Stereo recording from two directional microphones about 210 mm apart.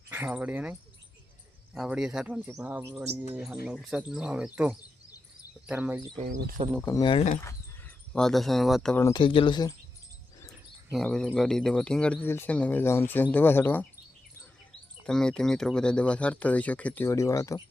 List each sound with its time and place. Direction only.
0.1 s speech: 5° right (ahead or behind)
6.8 s speech: 20° left (ahead or behind)
7.4 s speech: 5° left (ahead or behind)
10.8 s speech: centre (ahead or behind)
15.0 s speech: 5° left (ahead or behind)